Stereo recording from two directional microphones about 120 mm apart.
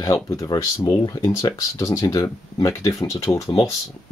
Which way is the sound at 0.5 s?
40° left (ahead or behind).